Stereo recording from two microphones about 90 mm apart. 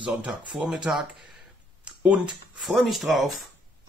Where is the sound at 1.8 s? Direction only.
15° right (ahead or behind).